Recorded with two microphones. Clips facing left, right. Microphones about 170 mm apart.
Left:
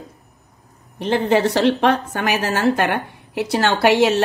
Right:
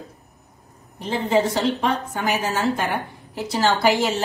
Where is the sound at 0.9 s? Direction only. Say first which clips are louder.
Left 3 dB; 70° left (ahead or behind).